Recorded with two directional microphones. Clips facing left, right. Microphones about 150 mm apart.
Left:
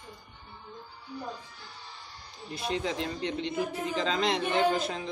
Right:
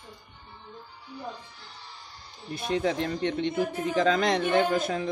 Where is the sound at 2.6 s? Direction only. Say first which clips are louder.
Right 4 dB; 50° right (ahead or behind).